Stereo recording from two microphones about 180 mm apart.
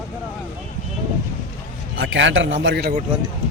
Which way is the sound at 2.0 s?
90° right.